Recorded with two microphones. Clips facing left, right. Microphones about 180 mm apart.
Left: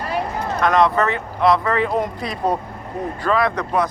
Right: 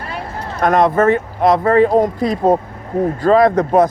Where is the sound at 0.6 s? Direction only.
50° right (ahead or behind).